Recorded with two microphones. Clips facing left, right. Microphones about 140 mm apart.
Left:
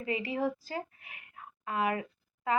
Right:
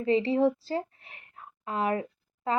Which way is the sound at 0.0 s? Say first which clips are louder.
Right 8 dB; 30° right (ahead or behind).